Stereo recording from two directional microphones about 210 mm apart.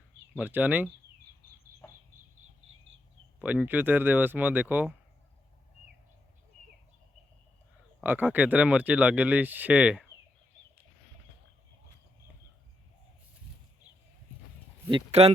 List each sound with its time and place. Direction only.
0.3 s speech: 5° right (ahead or behind)
3.4 s speech: 10° right (ahead or behind)
8.0 s speech: 10° right (ahead or behind)
14.8 s speech: 25° right (ahead or behind)